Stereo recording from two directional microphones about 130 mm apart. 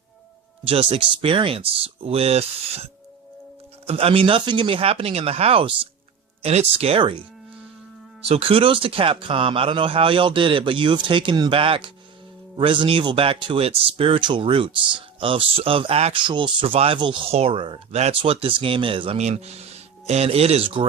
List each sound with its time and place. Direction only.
0.6 s speech: 45° right (ahead or behind)
3.8 s speech: 45° right (ahead or behind)
8.2 s speech: 45° right (ahead or behind)
16.2 s speech: 40° right (ahead or behind)
17.9 s speech: 55° right (ahead or behind)
18.2 s speech: 45° right (ahead or behind)